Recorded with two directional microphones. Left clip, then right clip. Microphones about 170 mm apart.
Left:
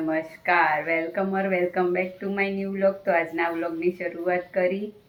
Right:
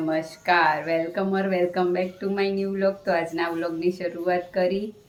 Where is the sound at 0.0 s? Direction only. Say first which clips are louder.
Right 1 dB; 15° right (ahead or behind).